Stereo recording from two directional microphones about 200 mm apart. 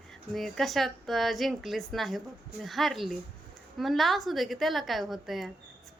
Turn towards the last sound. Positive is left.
turn(degrees=0)  # may be behind; listen again after turning